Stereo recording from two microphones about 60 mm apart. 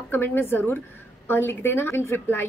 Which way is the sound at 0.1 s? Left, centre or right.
Left.